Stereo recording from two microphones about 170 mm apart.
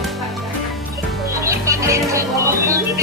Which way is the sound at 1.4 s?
15° right (ahead or behind).